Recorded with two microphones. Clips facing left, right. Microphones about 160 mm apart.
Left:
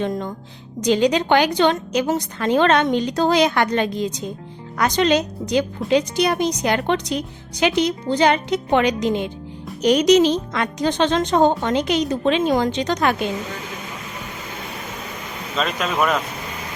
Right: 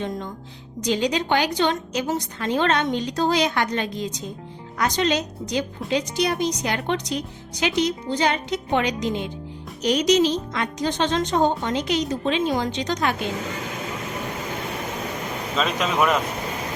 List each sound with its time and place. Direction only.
0.8 s a woman's voice: 60° left (ahead or behind)
15.5 s speech: centre (ahead or behind)